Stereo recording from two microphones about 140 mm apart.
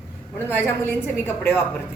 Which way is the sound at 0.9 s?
15° left (ahead or behind).